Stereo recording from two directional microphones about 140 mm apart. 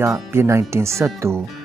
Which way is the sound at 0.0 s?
20° right (ahead or behind).